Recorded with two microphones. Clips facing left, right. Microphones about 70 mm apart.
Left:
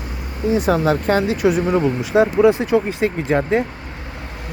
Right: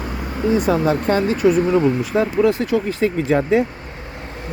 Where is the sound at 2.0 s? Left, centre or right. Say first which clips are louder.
Left 3 dB; left.